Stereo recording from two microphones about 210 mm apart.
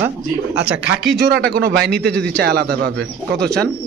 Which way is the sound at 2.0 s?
5° left (ahead or behind).